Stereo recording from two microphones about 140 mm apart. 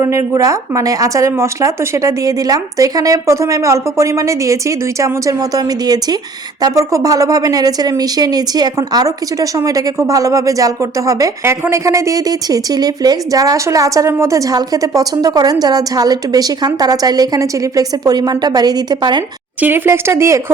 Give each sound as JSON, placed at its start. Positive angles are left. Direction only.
{"t": 0.0, "sound": "speech", "side_deg": -20}
{"t": 19.6, "sound": "a woman's voice", "side_deg": -15}